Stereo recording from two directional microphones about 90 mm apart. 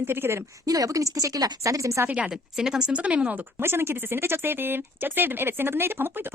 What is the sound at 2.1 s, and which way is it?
A woman's voice, 15° right (ahead or behind).